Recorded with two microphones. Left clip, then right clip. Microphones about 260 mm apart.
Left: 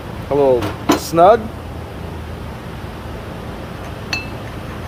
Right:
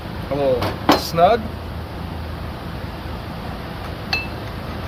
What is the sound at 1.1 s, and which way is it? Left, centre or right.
Speech, centre.